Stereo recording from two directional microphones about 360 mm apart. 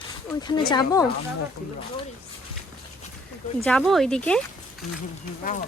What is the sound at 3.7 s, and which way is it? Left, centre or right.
Speech, centre.